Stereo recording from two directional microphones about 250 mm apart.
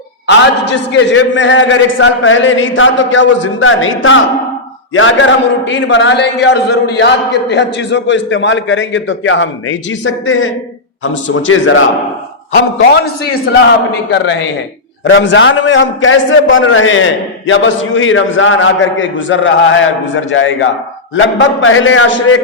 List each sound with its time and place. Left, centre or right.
0.3 s a man's voice: left
13.5 s a man's voice: left